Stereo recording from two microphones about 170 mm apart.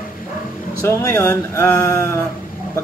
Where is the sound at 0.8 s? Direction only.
15° left (ahead or behind).